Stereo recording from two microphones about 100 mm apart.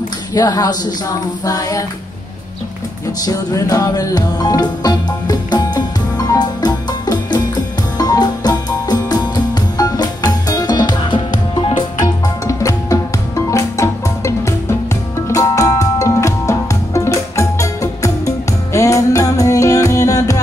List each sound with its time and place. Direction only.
0.3 s speech: 40° left (ahead or behind)
3.3 s music: 40° left (ahead or behind)
12.4 s music: 35° left (ahead or behind)